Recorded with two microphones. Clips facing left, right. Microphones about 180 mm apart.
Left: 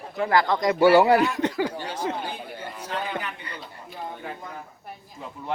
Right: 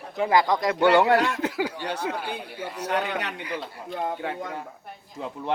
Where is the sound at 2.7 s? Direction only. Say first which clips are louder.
Right 4 dB; 70° right (ahead or behind).